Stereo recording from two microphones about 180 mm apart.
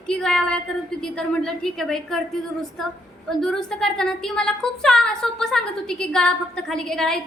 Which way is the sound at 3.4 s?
5° left (ahead or behind).